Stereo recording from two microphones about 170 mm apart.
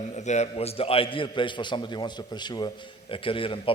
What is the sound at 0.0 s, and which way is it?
A man's voice, 40° left (ahead or behind).